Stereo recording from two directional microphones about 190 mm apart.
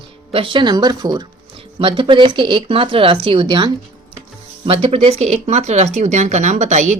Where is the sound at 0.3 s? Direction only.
25° right (ahead or behind).